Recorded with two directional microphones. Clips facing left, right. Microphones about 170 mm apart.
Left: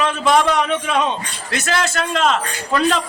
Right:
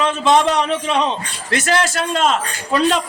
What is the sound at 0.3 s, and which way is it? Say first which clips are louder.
Speech: right 1 dB; 25° right (ahead or behind).